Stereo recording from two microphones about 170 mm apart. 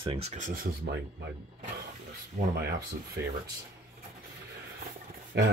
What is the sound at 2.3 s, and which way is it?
Speech, 50° right (ahead or behind).